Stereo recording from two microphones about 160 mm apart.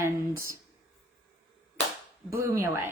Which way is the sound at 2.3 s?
20° right (ahead or behind).